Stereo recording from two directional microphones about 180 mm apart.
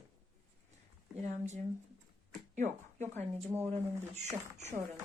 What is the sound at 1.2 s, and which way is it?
Speech, 40° right (ahead or behind).